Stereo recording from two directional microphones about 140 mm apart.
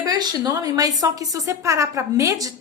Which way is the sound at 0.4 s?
25° right (ahead or behind).